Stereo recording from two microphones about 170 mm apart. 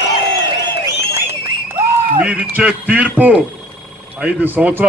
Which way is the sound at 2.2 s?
10° right (ahead or behind).